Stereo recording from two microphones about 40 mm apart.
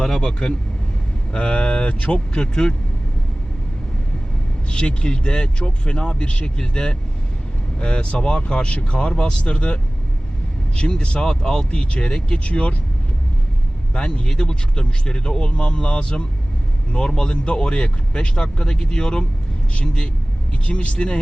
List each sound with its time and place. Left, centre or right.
0.0 s speech: centre
1.3 s speech: left
4.7 s speech: left
13.9 s speech: left